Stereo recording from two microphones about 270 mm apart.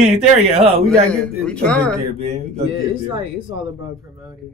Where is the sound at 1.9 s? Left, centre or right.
Right.